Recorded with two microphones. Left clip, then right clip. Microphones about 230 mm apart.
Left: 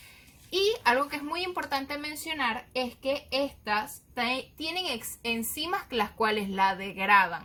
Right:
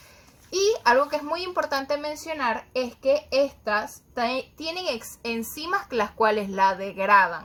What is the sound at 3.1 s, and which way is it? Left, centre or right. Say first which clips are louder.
A woman's voice: right 9 dB; centre.